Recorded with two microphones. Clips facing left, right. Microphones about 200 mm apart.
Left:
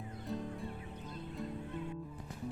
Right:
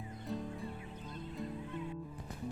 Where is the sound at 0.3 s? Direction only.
Centre (ahead or behind).